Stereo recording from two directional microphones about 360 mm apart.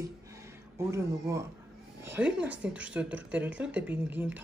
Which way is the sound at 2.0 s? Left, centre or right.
Centre.